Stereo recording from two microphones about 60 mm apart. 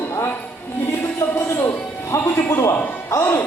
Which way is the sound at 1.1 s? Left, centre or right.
Left.